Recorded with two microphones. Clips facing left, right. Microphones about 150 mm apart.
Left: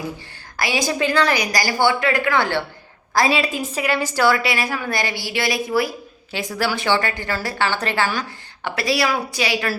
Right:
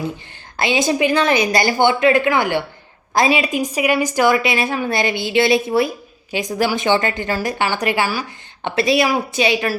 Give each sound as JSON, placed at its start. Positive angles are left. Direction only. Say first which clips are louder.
{"t": 0.5, "sound": "a woman's voice", "louder": "right 4 dB", "side_deg": -25}
{"t": 8.6, "sound": "a woman's voice", "louder": "right 4 dB", "side_deg": -20}